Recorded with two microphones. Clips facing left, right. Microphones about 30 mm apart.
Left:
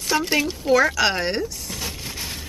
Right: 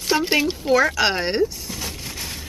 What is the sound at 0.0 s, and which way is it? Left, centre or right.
Speech, centre.